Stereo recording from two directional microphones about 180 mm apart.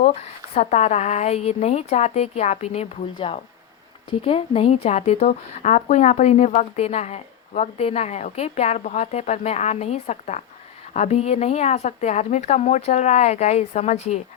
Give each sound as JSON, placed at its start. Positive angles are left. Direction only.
{"t": 0.0, "sound": "speech", "side_deg": 35}